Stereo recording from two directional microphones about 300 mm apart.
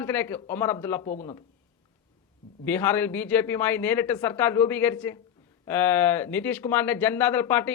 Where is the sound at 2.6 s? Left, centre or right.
Centre.